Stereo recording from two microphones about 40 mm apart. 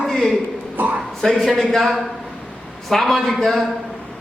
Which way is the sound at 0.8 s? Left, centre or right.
Right.